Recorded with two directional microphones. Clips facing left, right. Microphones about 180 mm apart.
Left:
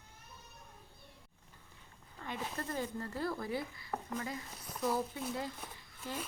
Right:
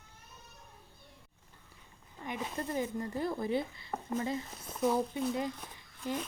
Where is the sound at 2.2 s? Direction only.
15° right (ahead or behind).